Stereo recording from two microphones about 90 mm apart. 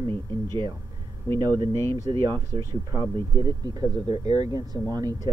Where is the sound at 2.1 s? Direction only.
60° right (ahead or behind).